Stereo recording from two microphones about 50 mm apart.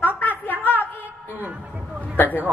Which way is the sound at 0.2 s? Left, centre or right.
Left.